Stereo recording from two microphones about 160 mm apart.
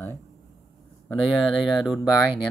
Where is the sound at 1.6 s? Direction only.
5° right (ahead or behind).